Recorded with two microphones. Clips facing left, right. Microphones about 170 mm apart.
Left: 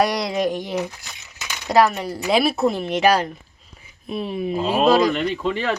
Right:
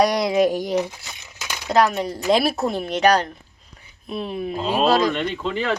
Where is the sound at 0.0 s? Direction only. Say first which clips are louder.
Right 3 dB; centre (ahead or behind).